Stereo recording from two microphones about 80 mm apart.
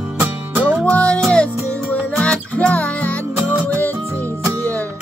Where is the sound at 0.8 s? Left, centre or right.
Centre.